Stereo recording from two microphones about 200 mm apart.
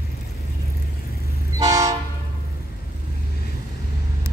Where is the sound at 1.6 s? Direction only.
15° right (ahead or behind).